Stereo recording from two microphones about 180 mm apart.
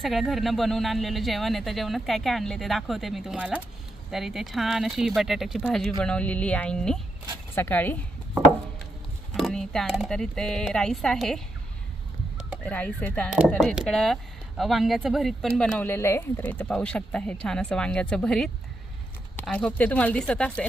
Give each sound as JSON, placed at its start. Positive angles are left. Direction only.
{"t": 0.0, "sound": "speech", "side_deg": 0}
{"t": 9.3, "sound": "speech", "side_deg": 0}
{"t": 12.6, "sound": "speech", "side_deg": 10}